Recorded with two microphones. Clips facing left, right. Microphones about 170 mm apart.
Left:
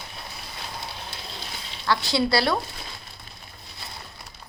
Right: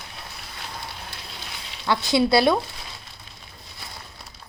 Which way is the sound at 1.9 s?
20° right (ahead or behind).